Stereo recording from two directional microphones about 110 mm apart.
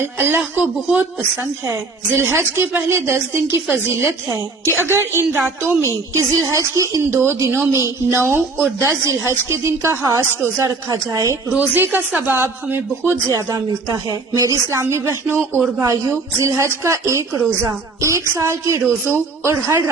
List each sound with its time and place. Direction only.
0.0 s a woman's voice: 20° right (ahead or behind)
4.8 s a woman's voice: 20° right (ahead or behind)
11.5 s speech: 15° right (ahead or behind)
13.2 s a woman's voice: 30° right (ahead or behind)